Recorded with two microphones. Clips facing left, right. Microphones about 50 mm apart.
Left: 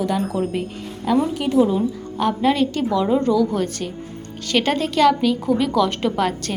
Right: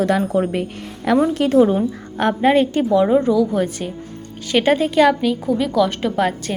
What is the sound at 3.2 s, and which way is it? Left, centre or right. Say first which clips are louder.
A woman's voice: right 2 dB; centre.